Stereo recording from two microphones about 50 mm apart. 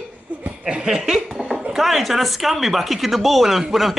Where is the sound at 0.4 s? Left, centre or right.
Right.